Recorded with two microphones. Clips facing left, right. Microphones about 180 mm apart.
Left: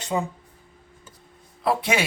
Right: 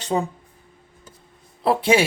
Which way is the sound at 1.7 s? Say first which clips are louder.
Right 5 dB; 30° right (ahead or behind).